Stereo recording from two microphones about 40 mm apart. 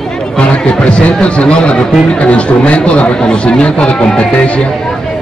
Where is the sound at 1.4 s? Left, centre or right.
Left.